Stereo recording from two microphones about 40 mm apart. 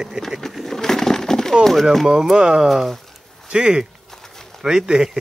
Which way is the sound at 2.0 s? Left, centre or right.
Centre.